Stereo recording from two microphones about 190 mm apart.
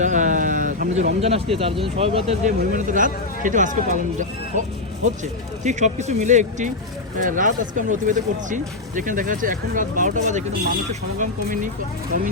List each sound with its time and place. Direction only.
0.0 s a sound: 40° right (ahead or behind)
1.2 s speech: 30° right (ahead or behind)
2.6 s speech: 45° right (ahead or behind)